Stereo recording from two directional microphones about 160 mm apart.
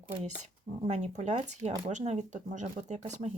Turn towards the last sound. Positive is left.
turn(degrees=-45)  # may be behind; listen again after turning